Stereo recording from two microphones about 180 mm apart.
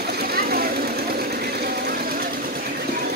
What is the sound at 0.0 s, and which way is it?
Vehicle, 60° right (ahead or behind).